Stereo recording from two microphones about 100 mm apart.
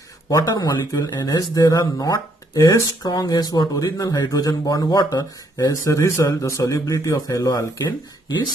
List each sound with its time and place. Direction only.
0.3 s speech: 40° left (ahead or behind)
7.8 s speech: 50° left (ahead or behind)